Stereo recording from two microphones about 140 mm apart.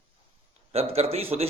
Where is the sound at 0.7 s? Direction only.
50° right (ahead or behind).